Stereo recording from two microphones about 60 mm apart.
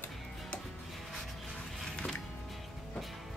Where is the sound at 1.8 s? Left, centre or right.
Centre.